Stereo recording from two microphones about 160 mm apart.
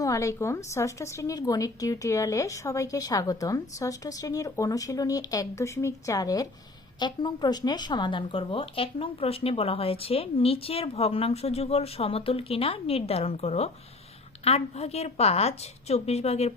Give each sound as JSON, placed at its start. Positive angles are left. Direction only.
{"t": 0.0, "sound": "a woman's voice", "side_deg": 20}